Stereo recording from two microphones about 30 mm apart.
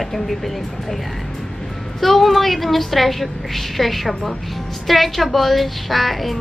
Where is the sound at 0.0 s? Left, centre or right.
Centre.